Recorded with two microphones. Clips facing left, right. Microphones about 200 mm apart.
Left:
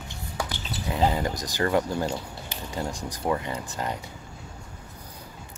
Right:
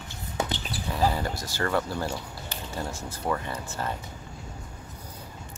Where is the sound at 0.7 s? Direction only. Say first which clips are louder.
Left 2 dB; 20° left (ahead or behind).